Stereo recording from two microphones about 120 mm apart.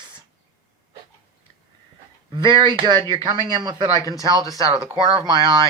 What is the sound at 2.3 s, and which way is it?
Speech, 40° right (ahead or behind).